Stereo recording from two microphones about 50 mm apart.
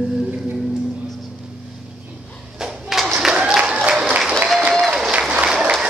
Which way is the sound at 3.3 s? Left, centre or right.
Centre.